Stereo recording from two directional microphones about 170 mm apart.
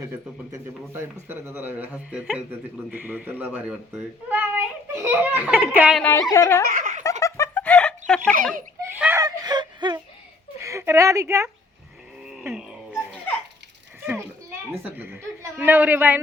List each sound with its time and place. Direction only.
1.3 s a child's voice: 15° right (ahead or behind)
6.0 s speech: 10° left (ahead or behind)
6.7 s giggle: 45° right (ahead or behind)
7.0 s snicker: 15° left (ahead or behind)
8.8 s a sound: 15° right (ahead or behind)
10.6 s a woman's voice: 15° right (ahead or behind)
12.2 s a sound: 5° right (ahead or behind)
12.5 s music: 5° right (ahead or behind)
14.0 s children playing: 10° right (ahead or behind)
14.7 s a child's voice: 10° right (ahead or behind)